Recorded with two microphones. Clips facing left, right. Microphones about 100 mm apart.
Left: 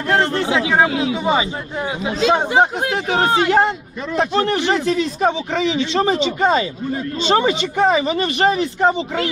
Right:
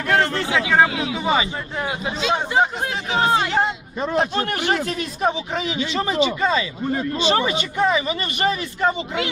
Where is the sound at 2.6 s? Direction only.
60° left (ahead or behind).